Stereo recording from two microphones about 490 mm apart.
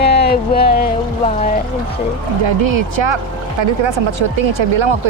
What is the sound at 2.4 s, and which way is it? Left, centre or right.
Speech, right.